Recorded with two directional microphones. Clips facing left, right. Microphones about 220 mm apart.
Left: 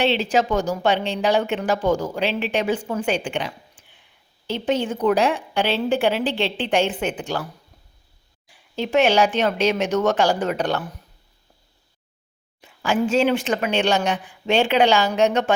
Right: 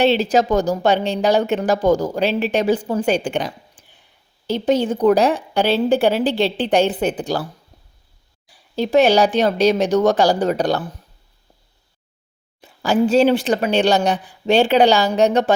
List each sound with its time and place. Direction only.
0.0 s a woman's voice: 40° right (ahead or behind)
8.4 s a woman's voice: 35° right (ahead or behind)
12.6 s a woman's voice: 35° right (ahead or behind)